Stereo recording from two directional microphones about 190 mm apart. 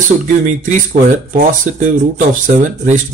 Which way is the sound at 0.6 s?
40° right (ahead or behind).